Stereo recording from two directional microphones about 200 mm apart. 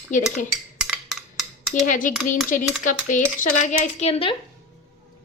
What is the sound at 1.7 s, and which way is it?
A woman's voice, 40° left (ahead or behind).